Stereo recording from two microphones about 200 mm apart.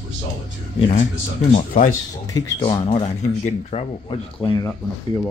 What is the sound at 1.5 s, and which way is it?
Speech, 35° left (ahead or behind).